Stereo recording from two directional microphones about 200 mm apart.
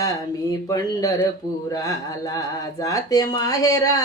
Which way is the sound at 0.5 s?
15° left (ahead or behind).